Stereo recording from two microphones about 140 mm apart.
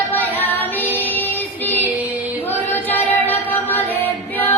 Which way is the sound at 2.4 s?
15° left (ahead or behind).